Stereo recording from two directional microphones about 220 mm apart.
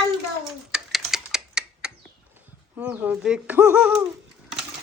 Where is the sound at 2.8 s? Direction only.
5° right (ahead or behind).